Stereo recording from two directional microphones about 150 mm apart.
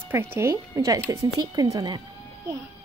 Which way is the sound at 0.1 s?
15° right (ahead or behind).